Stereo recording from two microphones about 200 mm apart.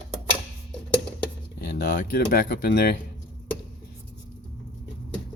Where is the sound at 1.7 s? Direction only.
55° left (ahead or behind).